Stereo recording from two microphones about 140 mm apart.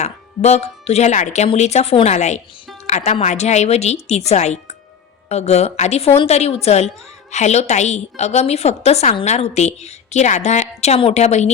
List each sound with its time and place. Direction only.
0.0 s a woman's voice: 50° left (ahead or behind)